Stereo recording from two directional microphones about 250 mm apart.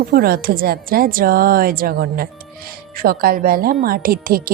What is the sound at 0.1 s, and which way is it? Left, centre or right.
A woman's voice, right.